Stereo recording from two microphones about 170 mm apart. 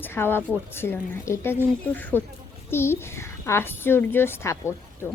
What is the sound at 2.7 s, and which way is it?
A woman's voice, 15° left (ahead or behind).